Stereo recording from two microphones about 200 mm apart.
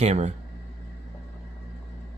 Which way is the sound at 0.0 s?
30° right (ahead or behind).